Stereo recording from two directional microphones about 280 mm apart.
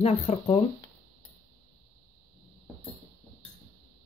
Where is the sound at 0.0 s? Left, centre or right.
Left.